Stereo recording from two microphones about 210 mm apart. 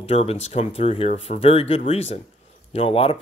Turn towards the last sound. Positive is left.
turn(degrees=25)  # may be behind; listen again after turning